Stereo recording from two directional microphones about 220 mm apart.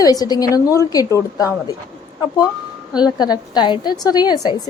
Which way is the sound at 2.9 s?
20° left (ahead or behind).